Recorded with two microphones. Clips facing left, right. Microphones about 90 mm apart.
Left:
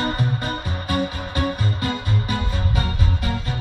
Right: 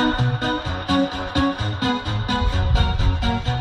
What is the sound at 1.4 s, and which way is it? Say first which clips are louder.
Music: right 3 dB; 70° right (ahead or behind).